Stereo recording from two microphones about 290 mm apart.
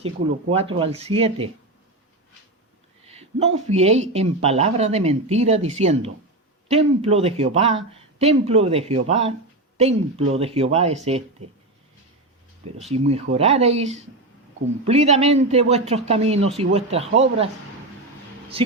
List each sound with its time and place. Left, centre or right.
0.0 s speech: right
3.1 s speech: right
12.9 s speech: right
18.5 s speech: centre